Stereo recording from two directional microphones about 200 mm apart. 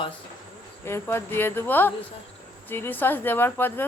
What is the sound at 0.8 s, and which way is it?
A woman's voice, 10° left (ahead or behind).